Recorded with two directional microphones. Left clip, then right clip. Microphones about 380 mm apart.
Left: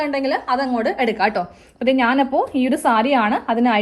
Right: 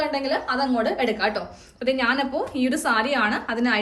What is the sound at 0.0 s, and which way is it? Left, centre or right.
A woman's voice, centre.